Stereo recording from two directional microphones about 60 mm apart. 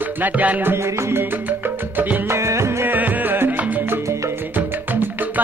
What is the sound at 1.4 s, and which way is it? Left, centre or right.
Music, right.